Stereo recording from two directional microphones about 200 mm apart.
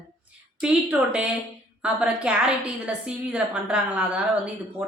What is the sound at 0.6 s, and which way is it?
A woman's voice, 5° right (ahead or behind).